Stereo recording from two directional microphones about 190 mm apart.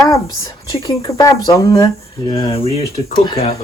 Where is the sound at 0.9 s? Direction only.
20° left (ahead or behind).